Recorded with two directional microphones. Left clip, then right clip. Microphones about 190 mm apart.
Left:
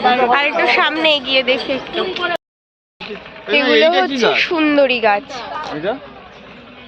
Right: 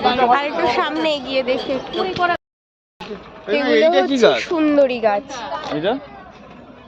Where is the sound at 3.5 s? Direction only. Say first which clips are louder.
Left 2 dB; 60° right (ahead or behind).